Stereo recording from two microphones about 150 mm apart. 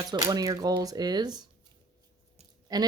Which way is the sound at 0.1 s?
25° right (ahead or behind).